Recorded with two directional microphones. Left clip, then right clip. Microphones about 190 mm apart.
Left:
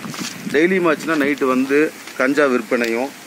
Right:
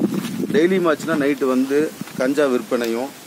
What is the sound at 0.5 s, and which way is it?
Speech, 30° left (ahead or behind).